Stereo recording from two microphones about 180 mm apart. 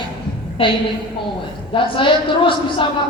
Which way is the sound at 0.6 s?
30° left (ahead or behind).